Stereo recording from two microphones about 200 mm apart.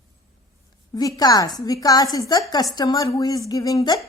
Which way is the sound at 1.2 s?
20° left (ahead or behind).